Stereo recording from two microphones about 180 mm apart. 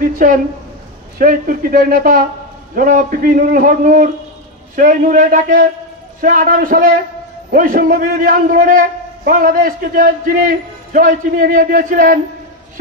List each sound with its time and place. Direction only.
0.0 s a man's voice: 50° right (ahead or behind)